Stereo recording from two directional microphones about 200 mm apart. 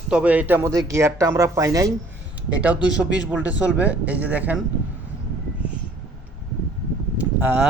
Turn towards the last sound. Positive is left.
turn(degrees=-10)  # may be behind; listen again after turning